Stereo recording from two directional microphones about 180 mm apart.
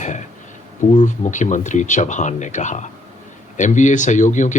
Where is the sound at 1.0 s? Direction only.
45° left (ahead or behind).